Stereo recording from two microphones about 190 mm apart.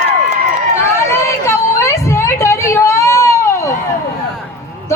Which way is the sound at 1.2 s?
15° left (ahead or behind).